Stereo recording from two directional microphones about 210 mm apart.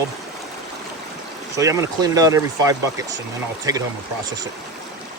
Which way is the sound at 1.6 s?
15° right (ahead or behind).